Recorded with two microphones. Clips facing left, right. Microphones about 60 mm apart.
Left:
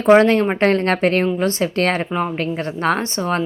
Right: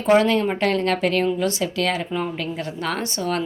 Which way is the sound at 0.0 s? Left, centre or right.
Left.